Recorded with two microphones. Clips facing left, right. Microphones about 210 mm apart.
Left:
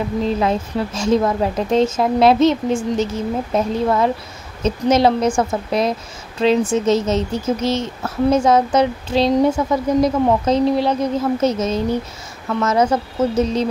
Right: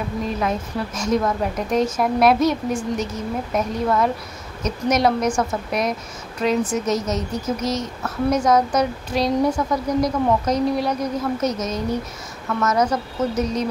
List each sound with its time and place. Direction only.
0.2 s a woman's voice: 30° left (ahead or behind)